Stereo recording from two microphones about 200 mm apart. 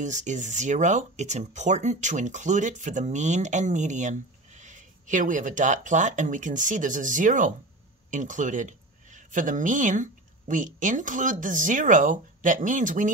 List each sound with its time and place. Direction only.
0.0 s speech: 35° right (ahead or behind)